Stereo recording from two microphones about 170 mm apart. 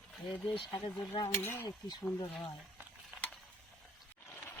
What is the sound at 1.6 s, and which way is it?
Speech, 25° left (ahead or behind).